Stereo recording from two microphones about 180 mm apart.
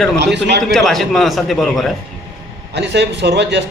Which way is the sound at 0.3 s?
75° right (ahead or behind).